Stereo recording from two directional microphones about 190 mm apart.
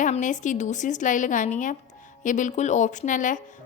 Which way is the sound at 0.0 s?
40° left (ahead or behind).